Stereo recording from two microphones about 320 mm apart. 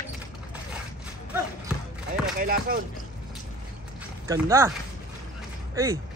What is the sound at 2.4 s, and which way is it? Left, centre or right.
Speech, right.